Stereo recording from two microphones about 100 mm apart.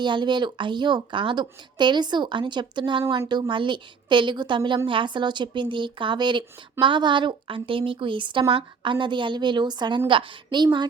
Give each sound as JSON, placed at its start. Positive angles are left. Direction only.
{"t": 0.0, "sound": "speech", "side_deg": -50}
{"t": 10.1, "sound": "speech", "side_deg": -60}